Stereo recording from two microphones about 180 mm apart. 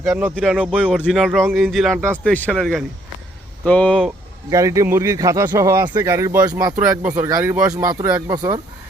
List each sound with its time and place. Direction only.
0.1 s speech: 10° right (ahead or behind); by 4.1 s 5° left (ahead or behind)
4.4 s speech: 15° right (ahead or behind)